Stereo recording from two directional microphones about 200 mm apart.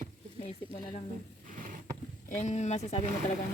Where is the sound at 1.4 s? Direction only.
40° right (ahead or behind).